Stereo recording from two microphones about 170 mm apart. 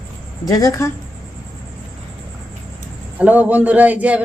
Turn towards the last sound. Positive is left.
turn(degrees=-10)  # may be behind; listen again after turning